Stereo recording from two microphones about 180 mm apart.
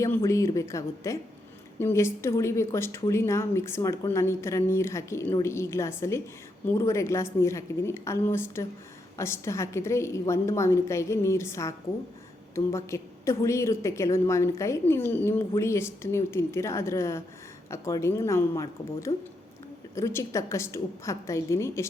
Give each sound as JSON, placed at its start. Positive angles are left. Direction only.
{"t": 0.0, "sound": "a woman's voice", "side_deg": 15}